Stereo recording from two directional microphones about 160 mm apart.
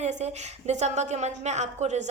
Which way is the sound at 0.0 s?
45° right (ahead or behind).